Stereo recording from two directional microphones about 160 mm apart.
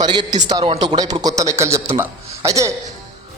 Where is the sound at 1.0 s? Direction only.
25° right (ahead or behind).